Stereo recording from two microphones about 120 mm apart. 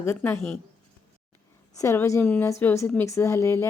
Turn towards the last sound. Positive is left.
turn(degrees=25)  # may be behind; listen again after turning